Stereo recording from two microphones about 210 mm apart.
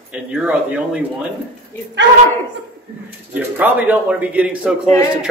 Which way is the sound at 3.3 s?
5° right (ahead or behind).